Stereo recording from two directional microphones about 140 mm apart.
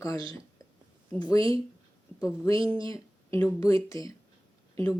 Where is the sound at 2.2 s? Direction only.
25° left (ahead or behind).